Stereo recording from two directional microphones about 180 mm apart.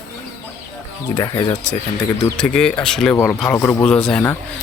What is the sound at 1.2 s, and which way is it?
Speech, 25° left (ahead or behind).